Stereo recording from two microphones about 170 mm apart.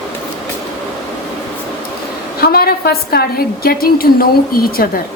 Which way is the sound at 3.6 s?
60° left (ahead or behind).